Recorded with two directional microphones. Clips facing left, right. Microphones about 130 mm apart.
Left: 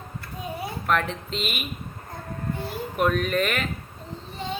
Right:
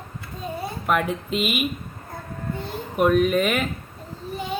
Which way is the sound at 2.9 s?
5° right (ahead or behind).